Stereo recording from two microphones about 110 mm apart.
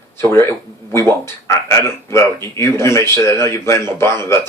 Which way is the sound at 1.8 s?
25° left (ahead or behind).